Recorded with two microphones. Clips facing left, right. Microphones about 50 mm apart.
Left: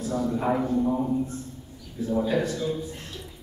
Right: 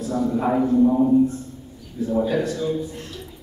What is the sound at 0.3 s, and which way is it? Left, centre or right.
Speech, centre.